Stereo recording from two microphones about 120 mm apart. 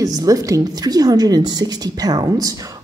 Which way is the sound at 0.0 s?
30° right (ahead or behind).